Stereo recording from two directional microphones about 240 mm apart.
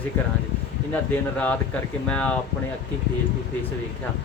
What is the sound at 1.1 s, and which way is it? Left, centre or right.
A man's voice, centre.